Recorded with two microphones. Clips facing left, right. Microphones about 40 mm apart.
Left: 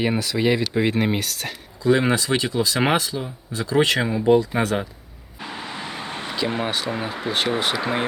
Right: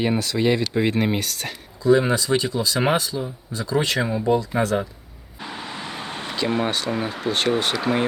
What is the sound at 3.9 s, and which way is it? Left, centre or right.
Speech, centre.